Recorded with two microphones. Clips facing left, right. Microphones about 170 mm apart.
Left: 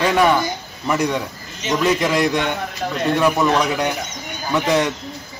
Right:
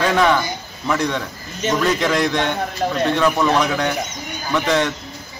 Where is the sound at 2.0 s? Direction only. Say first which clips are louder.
Left 1 dB; centre (ahead or behind).